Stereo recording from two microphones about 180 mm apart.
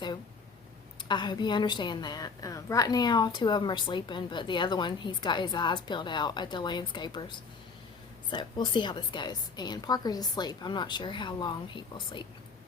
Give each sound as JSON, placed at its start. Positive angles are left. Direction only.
{"t": 1.0, "sound": "a woman's voice", "side_deg": 25}